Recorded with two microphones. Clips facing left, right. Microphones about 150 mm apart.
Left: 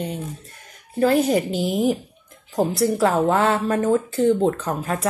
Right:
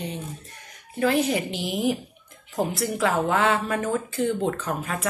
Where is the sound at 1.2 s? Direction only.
40° left (ahead or behind).